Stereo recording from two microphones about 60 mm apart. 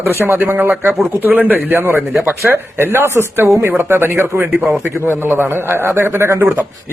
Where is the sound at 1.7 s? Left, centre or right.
Right.